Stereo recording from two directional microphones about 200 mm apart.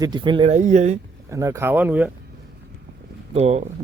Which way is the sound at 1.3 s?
15° right (ahead or behind).